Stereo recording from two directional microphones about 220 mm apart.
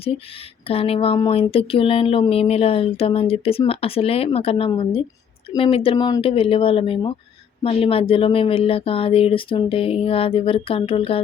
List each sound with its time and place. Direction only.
0.7 s speech: 25° left (ahead or behind)